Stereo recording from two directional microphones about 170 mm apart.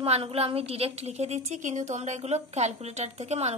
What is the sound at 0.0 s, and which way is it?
A woman's voice, 35° right (ahead or behind).